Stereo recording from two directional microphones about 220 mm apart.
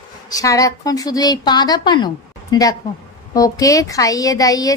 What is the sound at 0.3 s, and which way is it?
A woman's voice, 15° left (ahead or behind).